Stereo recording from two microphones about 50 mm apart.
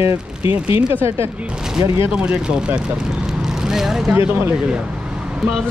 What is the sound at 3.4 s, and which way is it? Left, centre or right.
Vehicle, centre.